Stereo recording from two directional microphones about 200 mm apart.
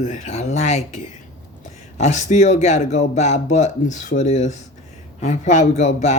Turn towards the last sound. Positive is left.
turn(degrees=35)  # may be behind; listen again after turning